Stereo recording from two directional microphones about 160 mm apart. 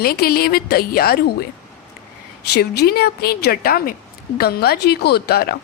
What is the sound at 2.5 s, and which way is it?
A woman's voice, 90° left.